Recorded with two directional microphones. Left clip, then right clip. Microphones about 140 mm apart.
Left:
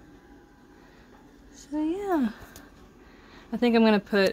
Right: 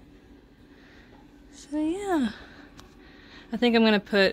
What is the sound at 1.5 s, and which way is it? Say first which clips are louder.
Speech: even; 5° right (ahead or behind).